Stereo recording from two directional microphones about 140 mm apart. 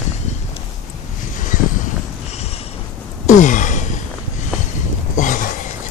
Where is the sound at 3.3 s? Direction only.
65° left (ahead or behind).